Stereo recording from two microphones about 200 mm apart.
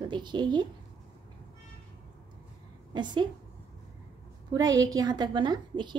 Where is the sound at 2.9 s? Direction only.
20° right (ahead or behind).